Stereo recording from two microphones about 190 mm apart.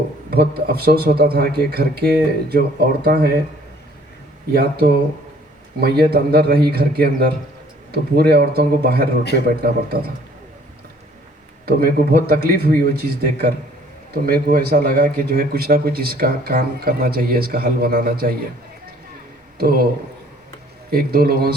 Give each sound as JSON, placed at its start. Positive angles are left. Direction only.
{"t": 0.3, "sound": "a man's voice", "side_deg": -55}
{"t": 4.5, "sound": "a man's voice", "side_deg": -55}
{"t": 11.6, "sound": "speech", "side_deg": -55}
{"t": 19.5, "sound": "speech", "side_deg": -50}
{"t": 20.9, "sound": "speech", "side_deg": -50}